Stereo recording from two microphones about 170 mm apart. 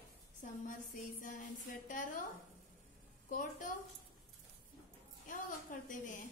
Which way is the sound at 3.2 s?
50° left (ahead or behind).